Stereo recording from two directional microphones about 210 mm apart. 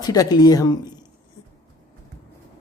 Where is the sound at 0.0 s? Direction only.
20° left (ahead or behind).